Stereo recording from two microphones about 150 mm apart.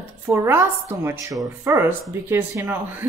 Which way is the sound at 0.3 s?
20° right (ahead or behind).